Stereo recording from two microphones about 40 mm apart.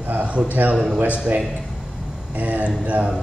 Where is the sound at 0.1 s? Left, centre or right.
Right.